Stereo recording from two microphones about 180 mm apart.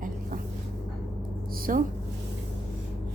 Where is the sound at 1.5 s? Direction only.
55° right (ahead or behind).